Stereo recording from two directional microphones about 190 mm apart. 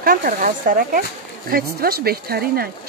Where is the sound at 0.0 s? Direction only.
45° right (ahead or behind).